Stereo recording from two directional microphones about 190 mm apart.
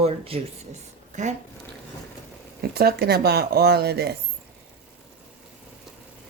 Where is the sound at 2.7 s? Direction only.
55° right (ahead or behind).